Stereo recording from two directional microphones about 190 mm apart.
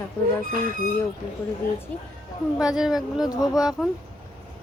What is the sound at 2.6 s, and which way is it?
Speech, 5° right (ahead or behind).